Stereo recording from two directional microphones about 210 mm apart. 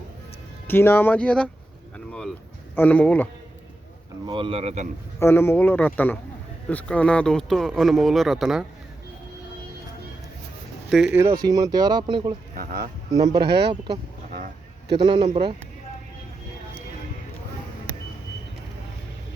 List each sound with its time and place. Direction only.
0.7 s speech: 10° left (ahead or behind)
2.7 s speech: 10° left (ahead or behind)
4.3 s speech: 25° right (ahead or behind)
5.2 s speech: 10° left (ahead or behind)
10.8 s speech: centre (ahead or behind)
11.4 s speech: 20° right (ahead or behind)
12.5 s speech: 45° right (ahead or behind)
13.1 s speech: 20° right (ahead or behind)
13.5 s speech: 50° right (ahead or behind)
14.3 s a sound: 50° right (ahead or behind)
14.9 s speech: 20° right (ahead or behind)